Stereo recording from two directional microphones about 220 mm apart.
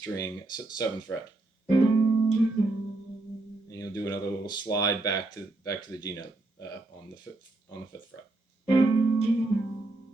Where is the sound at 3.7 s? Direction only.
15° left (ahead or behind).